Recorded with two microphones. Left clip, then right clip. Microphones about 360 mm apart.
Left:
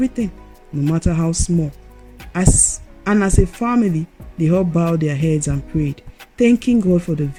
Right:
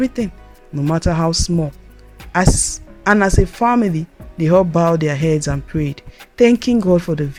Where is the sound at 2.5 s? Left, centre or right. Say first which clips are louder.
Left 3 dB; centre.